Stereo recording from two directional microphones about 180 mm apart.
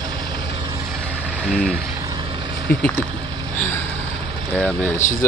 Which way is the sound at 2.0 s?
25° right (ahead or behind).